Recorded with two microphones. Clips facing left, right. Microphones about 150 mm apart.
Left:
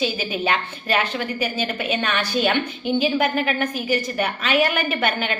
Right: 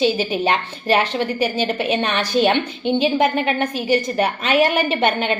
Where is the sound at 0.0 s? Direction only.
30° right (ahead or behind).